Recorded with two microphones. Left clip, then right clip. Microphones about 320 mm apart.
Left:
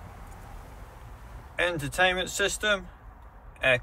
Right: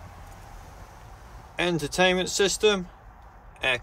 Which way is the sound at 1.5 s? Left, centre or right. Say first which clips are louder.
Right 1 dB; centre.